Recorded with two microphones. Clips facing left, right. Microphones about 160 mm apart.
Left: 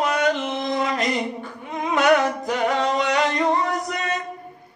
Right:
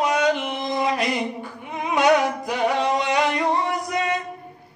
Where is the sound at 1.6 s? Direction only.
10° right (ahead or behind).